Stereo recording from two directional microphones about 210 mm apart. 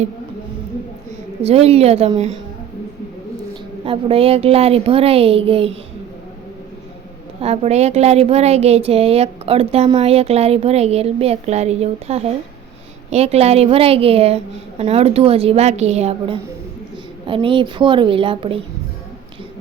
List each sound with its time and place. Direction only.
1.4 s a woman's voice: 30° right (ahead or behind)
3.8 s a woman's voice: 25° right (ahead or behind)
7.4 s a woman's voice: 30° right (ahead or behind)